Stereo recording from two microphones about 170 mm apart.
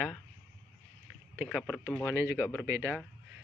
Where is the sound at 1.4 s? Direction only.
Centre (ahead or behind).